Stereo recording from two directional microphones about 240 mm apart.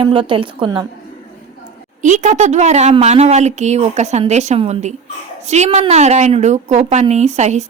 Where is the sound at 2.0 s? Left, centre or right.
Right.